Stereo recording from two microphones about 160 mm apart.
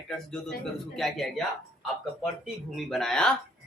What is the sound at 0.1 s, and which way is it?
Speech, 5° left (ahead or behind).